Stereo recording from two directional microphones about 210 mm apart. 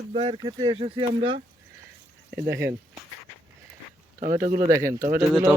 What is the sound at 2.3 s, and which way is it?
Speech, 15° right (ahead or behind).